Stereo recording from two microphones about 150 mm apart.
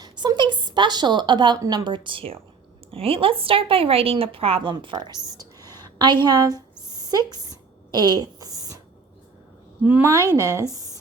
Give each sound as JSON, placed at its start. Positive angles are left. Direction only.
{"t": 0.0, "sound": "a woman's voice", "side_deg": -30}
{"t": 6.8, "sound": "a sound", "side_deg": -25}
{"t": 9.8, "sound": "a woman's voice", "side_deg": -15}
{"t": 10.2, "sound": "speech", "side_deg": 15}
{"t": 10.7, "sound": "speech", "side_deg": -25}